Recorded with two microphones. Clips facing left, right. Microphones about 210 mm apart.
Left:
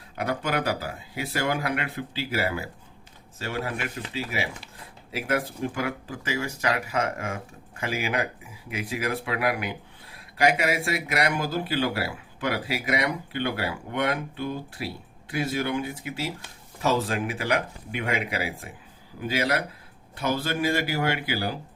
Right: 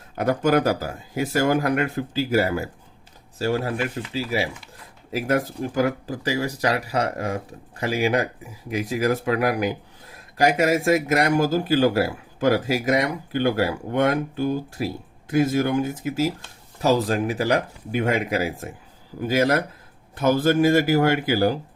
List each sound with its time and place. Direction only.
0.2 s speech: 45° right (ahead or behind)